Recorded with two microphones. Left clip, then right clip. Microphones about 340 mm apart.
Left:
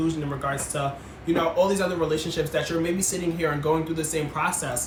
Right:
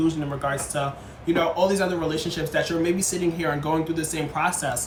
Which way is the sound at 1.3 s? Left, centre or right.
Centre.